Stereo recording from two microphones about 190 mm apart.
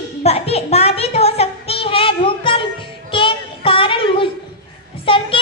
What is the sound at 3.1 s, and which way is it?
Child singing, 25° left (ahead or behind).